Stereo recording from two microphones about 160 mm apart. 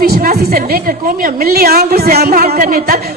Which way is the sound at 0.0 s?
70° right (ahead or behind).